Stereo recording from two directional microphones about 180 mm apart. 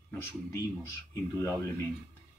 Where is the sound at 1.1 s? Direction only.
15° left (ahead or behind).